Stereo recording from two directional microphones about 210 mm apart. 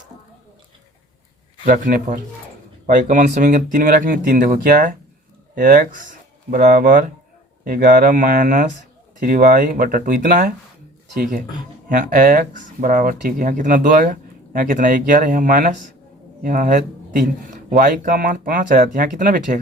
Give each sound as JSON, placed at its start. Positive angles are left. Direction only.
{"t": 1.6, "sound": "speech", "side_deg": -40}